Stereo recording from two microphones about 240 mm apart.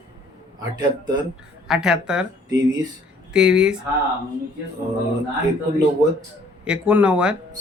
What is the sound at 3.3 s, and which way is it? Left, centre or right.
Speech, centre.